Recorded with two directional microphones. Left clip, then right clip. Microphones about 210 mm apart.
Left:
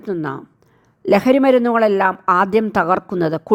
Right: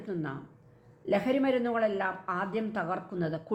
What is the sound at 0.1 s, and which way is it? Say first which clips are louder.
A man's voice: left 13 dB; 50° left (ahead or behind).